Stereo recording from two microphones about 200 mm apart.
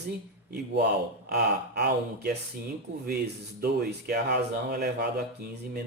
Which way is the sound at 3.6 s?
50° right (ahead or behind).